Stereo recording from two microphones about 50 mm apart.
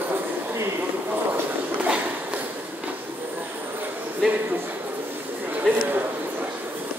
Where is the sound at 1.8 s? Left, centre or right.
Right.